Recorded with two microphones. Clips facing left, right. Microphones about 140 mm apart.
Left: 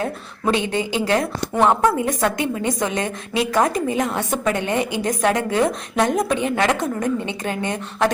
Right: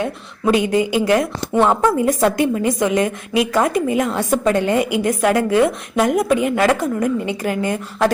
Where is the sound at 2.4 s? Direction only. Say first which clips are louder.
Right 5 dB; 25° left (ahead or behind).